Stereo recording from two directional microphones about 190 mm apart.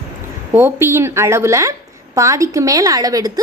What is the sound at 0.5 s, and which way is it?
A woman's voice, 10° right (ahead or behind).